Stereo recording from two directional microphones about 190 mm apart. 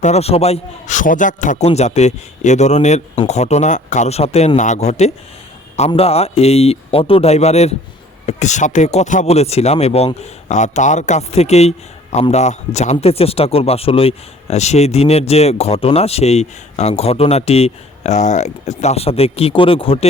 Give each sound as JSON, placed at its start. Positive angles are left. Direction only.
{"t": 0.0, "sound": "speech", "side_deg": 35}